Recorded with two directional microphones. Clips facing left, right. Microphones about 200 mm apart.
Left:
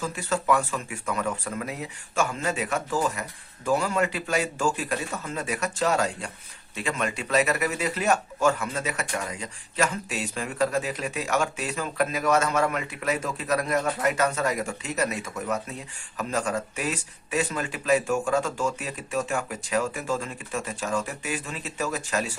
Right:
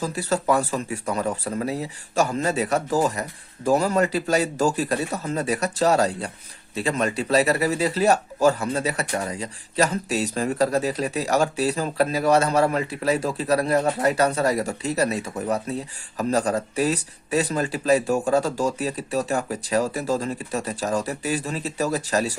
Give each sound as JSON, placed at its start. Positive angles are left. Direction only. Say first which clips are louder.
{"t": 0.0, "sound": "speech", "louder": "right 4 dB", "side_deg": -35}